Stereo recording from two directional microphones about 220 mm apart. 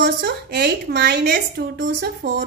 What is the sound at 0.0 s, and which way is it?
A woman's voice, 50° right (ahead or behind).